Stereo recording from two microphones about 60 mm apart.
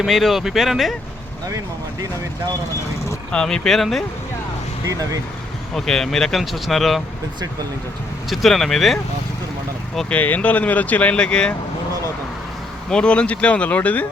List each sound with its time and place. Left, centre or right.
0.0 s speech: centre
3.3 s speech: centre
4.9 s speech: right
5.7 s speech: centre
8.3 s speech: centre
10.1 s speech: left
12.9 s speech: centre